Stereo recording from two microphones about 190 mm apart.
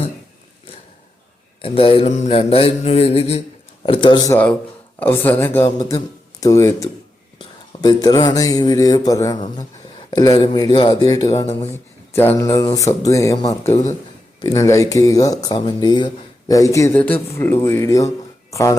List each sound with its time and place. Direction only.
1.6 s mantra: 30° left (ahead or behind)
3.8 s speech: 25° left (ahead or behind)
4.3 s speech: 10° left (ahead or behind)
5.6 s speech: 20° left (ahead or behind)